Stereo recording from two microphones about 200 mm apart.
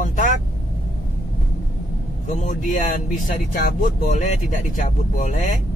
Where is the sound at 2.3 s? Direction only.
40° left (ahead or behind).